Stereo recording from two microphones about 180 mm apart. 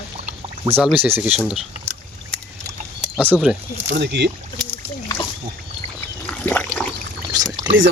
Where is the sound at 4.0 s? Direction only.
70° right (ahead or behind).